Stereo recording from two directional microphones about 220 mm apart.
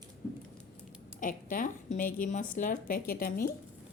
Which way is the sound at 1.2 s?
40° left (ahead or behind).